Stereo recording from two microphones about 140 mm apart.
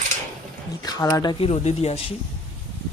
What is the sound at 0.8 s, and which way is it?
Speech, 30° left (ahead or behind).